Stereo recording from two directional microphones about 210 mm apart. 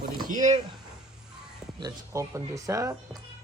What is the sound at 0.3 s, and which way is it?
Speech, 35° right (ahead or behind).